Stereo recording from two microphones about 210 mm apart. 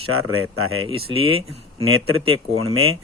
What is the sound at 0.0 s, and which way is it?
Speech, 90° right.